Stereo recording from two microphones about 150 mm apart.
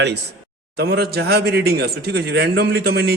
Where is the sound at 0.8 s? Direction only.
90° right.